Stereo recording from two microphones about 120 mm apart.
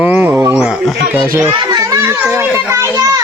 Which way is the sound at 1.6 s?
30° right (ahead or behind).